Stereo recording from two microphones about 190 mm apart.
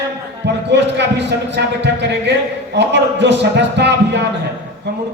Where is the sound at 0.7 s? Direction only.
65° right (ahead or behind).